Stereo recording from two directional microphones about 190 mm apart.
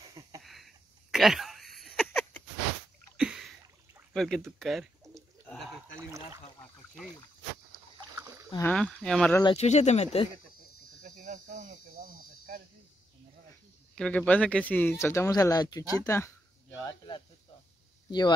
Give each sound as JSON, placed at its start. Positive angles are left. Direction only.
{"t": 0.4, "sound": "a sound", "side_deg": 0}
{"t": 3.2, "sound": "a sound", "side_deg": -5}
{"t": 4.1, "sound": "speech", "side_deg": 0}
{"t": 5.5, "sound": "a sound", "side_deg": 0}
{"t": 5.9, "sound": "speech", "side_deg": -15}
{"t": 8.5, "sound": "speech", "side_deg": 5}
{"t": 9.4, "sound": "speech", "side_deg": 30}
{"t": 11.0, "sound": "cricket", "side_deg": -40}
{"t": 13.9, "sound": "speech", "side_deg": 5}
{"t": 16.8, "sound": "snake", "side_deg": 25}